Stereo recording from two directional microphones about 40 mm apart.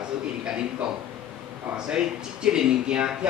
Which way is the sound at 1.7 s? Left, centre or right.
Centre.